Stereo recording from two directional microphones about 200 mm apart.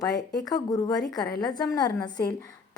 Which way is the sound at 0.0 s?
20° left (ahead or behind).